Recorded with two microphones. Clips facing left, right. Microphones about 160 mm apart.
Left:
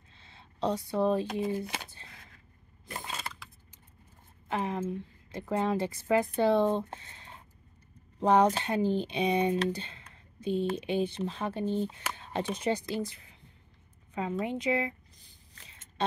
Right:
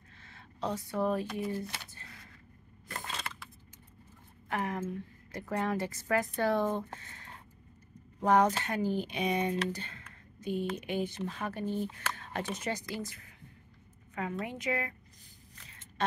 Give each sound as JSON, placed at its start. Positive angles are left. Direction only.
{"t": 0.3, "sound": "speech", "side_deg": 30}
{"t": 2.9, "sound": "a sound", "side_deg": 10}
{"t": 4.5, "sound": "a woman's voice", "side_deg": 25}
{"t": 14.4, "sound": "a woman's voice", "side_deg": 25}